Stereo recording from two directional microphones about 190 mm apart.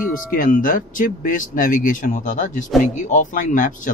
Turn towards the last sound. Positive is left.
turn(degrees=45)  # may be behind; listen again after turning